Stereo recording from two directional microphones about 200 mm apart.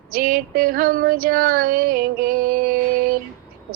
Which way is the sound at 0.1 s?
45° right (ahead or behind).